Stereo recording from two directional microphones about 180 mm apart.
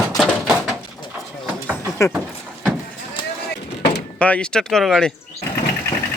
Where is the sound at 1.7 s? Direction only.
15° left (ahead or behind).